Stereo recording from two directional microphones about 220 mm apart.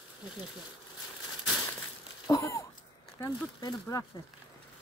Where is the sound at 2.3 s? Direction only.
15° left (ahead or behind).